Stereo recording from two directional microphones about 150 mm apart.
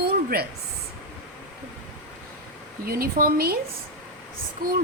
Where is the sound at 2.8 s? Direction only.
75° right (ahead or behind).